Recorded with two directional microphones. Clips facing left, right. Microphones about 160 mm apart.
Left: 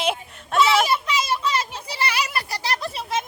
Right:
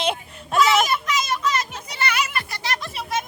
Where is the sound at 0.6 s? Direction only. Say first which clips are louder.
Even; 30° left (ahead or behind).